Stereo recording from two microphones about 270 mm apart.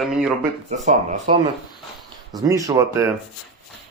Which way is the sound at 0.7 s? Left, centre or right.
Right.